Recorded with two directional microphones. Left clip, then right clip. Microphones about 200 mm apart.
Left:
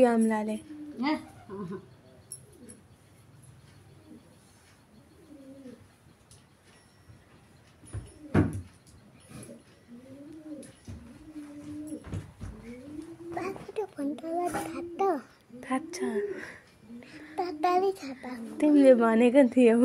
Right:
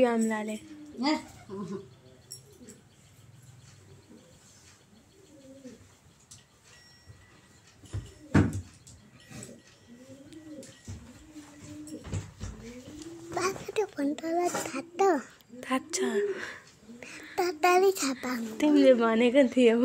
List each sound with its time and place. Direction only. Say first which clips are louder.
0.0 s a woman's voice: left 2 dB; 20° left (ahead or behind)
13.3 s a sound: right 5 dB; 45° right (ahead or behind)
13.7 s a child's voice: right 1 dB; 15° right (ahead or behind)
15.6 s speech: right 2 dB; 10° left (ahead or behind)
17.1 s a sound: right 3 dB; 10° left (ahead or behind)
17.4 s a child's voice: right 3 dB; 35° right (ahead or behind)
18.6 s speech: left 2 dB; 15° left (ahead or behind)